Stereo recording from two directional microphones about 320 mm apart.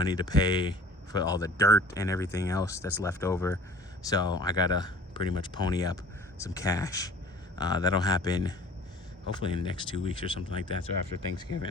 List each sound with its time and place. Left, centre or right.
0.0 s speech: centre